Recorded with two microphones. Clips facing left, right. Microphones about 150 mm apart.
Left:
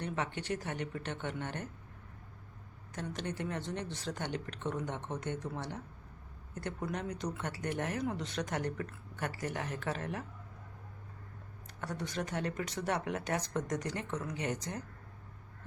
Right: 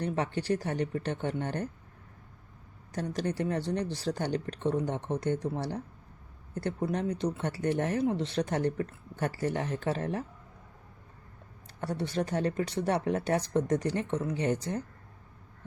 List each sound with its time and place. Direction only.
0.0 s speech: 35° right (ahead or behind)
2.9 s speech: 35° right (ahead or behind)
11.8 s speech: 30° right (ahead or behind)